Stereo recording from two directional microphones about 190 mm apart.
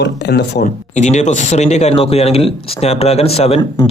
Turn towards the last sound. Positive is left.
turn(degrees=35)  # may be behind; listen again after turning